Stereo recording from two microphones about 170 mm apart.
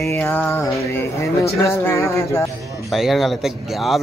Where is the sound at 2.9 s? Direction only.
Centre (ahead or behind).